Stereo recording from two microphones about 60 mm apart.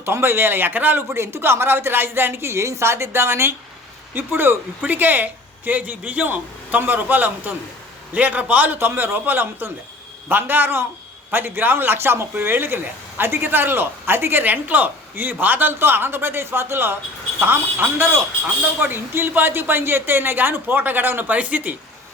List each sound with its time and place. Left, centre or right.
0.0 s speech: right
1.1 s a woman's voice: right